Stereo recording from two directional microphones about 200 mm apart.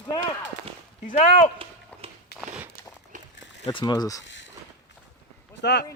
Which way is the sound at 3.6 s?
20° left (ahead or behind).